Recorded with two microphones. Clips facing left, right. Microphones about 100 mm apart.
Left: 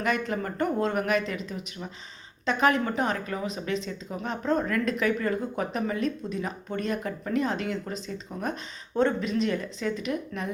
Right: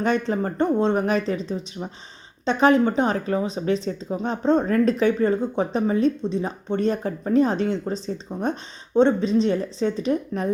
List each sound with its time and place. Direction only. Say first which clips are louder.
0.0 s speech: right 6 dB; 30° right (ahead or behind)